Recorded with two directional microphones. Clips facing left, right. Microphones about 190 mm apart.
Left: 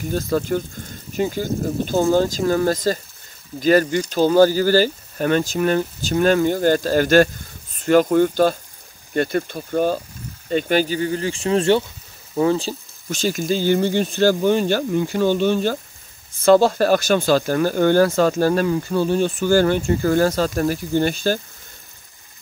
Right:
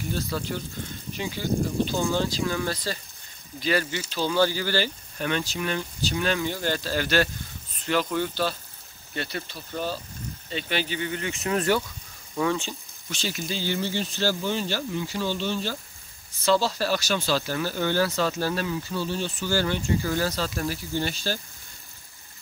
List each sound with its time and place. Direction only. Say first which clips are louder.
0.1 s speech: left 10 dB; 45° left (ahead or behind)